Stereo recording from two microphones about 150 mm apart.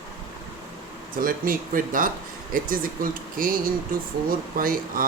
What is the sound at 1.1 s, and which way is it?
Speech, 70° right (ahead or behind).